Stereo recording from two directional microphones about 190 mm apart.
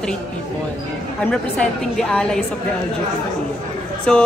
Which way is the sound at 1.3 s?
5° left (ahead or behind).